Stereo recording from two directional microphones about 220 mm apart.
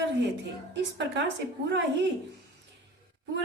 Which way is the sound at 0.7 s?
55° right (ahead or behind).